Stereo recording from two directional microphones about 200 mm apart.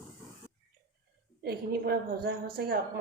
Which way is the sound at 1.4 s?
50° right (ahead or behind).